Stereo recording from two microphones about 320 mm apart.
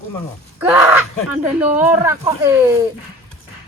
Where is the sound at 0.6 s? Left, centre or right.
Centre.